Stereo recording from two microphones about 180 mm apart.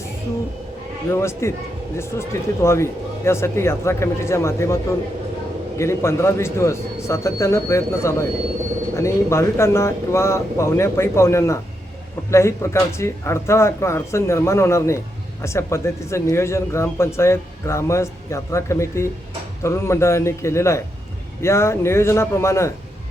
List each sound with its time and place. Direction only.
1.1 s speech: 15° left (ahead or behind)